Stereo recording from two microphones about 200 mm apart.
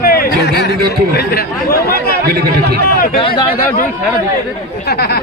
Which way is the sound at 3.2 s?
25° left (ahead or behind).